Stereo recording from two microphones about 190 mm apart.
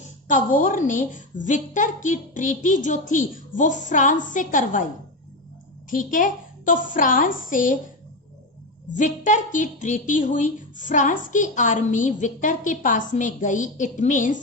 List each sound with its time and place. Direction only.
0.3 s a woman's voice: 45° left (ahead or behind)
5.9 s a woman's voice: 45° left (ahead or behind)
9.0 s a woman's voice: 40° left (ahead or behind)